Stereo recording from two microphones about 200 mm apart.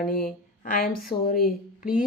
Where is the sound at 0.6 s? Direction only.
45° left (ahead or behind).